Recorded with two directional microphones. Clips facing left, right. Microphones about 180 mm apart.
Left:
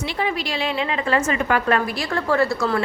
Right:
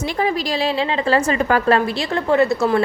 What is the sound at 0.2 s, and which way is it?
A woman's voice, 35° right (ahead or behind).